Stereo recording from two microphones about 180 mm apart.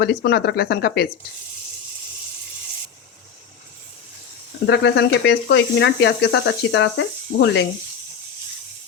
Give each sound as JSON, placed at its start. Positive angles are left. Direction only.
{"t": 0.0, "sound": "speech", "side_deg": 65}
{"t": 4.6, "sound": "speech", "side_deg": 70}